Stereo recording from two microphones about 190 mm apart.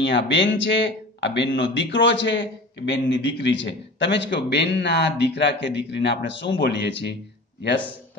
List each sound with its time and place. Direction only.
0.0 s speech: 65° left (ahead or behind)